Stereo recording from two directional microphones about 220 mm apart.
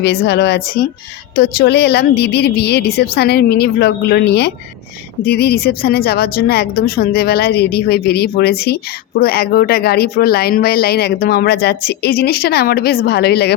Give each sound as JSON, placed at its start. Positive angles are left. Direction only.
{"t": 0.0, "sound": "a woman's voice", "side_deg": 50}